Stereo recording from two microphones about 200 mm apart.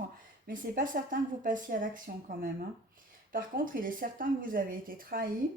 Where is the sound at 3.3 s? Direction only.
45° right (ahead or behind).